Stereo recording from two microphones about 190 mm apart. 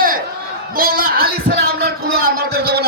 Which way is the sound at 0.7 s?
50° right (ahead or behind).